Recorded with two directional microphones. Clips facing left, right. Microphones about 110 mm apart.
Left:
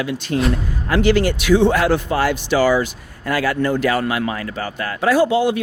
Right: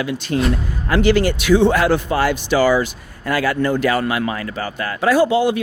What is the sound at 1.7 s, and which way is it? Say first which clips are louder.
Speech: right 1 dB; 20° right (ahead or behind).